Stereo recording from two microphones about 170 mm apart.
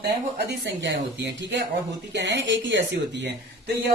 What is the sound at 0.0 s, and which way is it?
Speech, 85° right.